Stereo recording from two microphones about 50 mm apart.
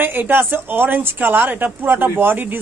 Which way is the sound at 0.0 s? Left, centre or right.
Right.